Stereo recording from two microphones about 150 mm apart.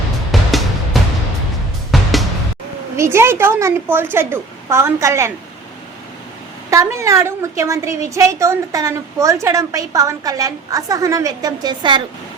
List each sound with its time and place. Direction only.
0.3 s music: centre (ahead or behind)
2.9 s a woman's voice: 15° right (ahead or behind)
6.7 s a woman's voice: 20° right (ahead or behind)